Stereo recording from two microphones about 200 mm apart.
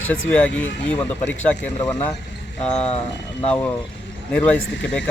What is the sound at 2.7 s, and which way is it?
Speech, 30° left (ahead or behind).